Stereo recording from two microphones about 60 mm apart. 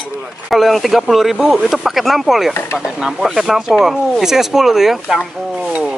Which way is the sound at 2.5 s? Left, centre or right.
Left.